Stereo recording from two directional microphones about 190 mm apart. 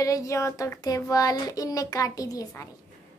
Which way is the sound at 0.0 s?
15° left (ahead or behind).